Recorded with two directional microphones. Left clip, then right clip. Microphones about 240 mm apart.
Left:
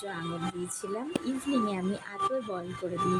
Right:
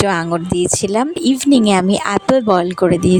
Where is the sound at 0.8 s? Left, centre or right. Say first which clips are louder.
Right 17 dB; right.